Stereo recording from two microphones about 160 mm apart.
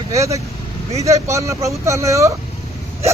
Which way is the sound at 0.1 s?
20° right (ahead or behind).